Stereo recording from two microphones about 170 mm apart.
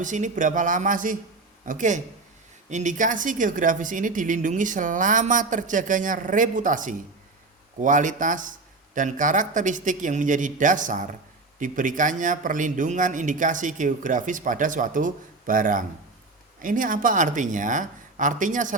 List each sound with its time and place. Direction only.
0.0 s speech: 50° right (ahead or behind)